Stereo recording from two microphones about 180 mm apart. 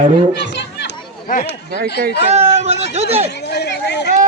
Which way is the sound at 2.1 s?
35° right (ahead or behind).